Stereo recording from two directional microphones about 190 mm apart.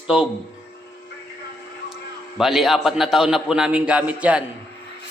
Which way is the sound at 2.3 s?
Centre (ahead or behind).